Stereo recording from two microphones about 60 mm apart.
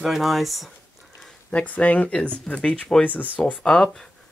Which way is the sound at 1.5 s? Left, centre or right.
Left.